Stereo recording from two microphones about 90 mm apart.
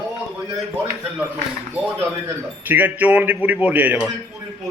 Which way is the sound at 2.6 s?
20° right (ahead or behind).